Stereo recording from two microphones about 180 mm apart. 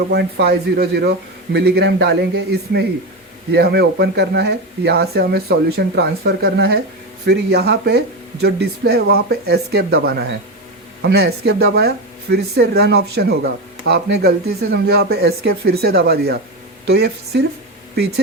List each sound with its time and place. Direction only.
0.1 s speech: 65° right (ahead or behind)